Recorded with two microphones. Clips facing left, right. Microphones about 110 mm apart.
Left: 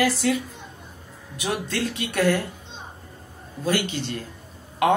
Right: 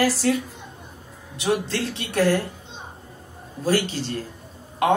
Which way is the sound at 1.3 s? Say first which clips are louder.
Right 4 dB; 30° right (ahead or behind).